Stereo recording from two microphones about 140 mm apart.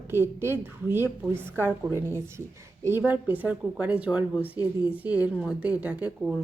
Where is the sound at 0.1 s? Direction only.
15° right (ahead or behind).